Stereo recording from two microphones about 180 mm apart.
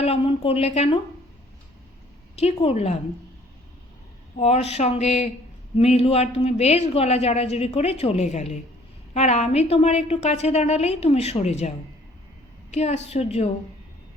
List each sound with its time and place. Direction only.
0.0 s a woman's voice: 35° left (ahead or behind)
2.3 s a woman's voice: 35° left (ahead or behind)
4.4 s a woman's voice: 35° left (ahead or behind)
12.7 s a woman's voice: 35° left (ahead or behind)